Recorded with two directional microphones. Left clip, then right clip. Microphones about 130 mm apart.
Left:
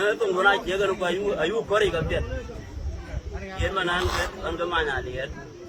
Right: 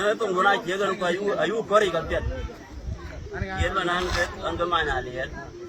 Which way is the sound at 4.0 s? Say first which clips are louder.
Even; 20° left (ahead or behind).